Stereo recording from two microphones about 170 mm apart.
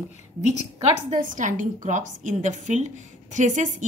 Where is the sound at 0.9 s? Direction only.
45° right (ahead or behind).